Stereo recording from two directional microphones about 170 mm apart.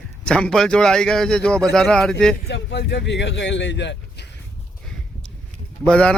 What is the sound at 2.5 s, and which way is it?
Speech, 85° left.